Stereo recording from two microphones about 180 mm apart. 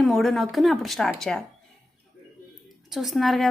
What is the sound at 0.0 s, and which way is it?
A woman's voice, centre (ahead or behind).